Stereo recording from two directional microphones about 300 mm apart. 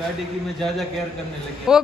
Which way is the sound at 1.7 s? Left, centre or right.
Centre.